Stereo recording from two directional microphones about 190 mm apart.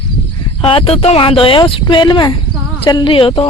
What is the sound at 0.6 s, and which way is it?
Speech, 30° left (ahead or behind).